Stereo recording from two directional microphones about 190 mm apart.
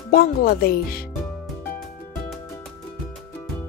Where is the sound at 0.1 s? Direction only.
55° left (ahead or behind).